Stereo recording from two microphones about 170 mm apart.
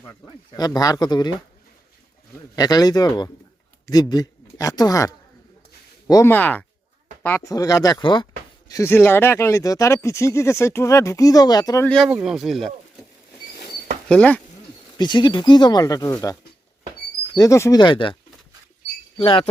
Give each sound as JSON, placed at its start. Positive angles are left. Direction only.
{"t": 0.0, "sound": "speech", "side_deg": 20}
{"t": 2.6, "sound": "speech", "side_deg": 20}
{"t": 8.7, "sound": "speech", "side_deg": 15}
{"t": 12.0, "sound": "speech", "side_deg": -5}
{"t": 14.1, "sound": "speech", "side_deg": 5}
{"t": 14.9, "sound": "speech", "side_deg": 25}
{"t": 17.3, "sound": "speech", "side_deg": 20}